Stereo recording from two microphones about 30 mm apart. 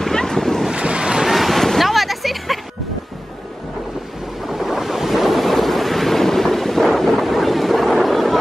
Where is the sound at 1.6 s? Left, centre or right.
Centre.